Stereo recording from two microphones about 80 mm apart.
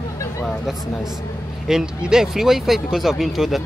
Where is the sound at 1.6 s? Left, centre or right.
Centre.